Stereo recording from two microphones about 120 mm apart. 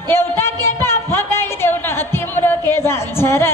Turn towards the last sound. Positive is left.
turn(degrees=20)  # may be behind; listen again after turning